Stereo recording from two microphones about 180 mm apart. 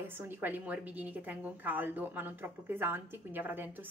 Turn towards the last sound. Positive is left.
turn(degrees=-10)  # may be behind; listen again after turning